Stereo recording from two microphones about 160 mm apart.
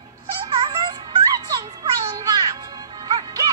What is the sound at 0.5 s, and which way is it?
Music, 30° right (ahead or behind).